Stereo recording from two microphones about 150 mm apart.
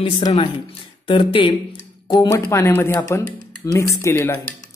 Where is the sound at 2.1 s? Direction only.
20° left (ahead or behind).